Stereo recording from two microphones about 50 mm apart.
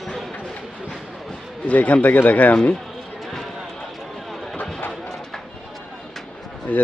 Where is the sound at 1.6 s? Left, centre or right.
Left.